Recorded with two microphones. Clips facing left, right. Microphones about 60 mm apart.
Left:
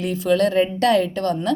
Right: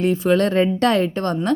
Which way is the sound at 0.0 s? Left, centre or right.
Right.